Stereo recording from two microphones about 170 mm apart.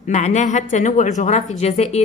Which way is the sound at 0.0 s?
45° left (ahead or behind).